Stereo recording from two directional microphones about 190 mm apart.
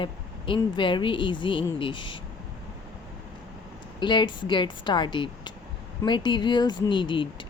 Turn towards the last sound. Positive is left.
turn(degrees=25)  # may be behind; listen again after turning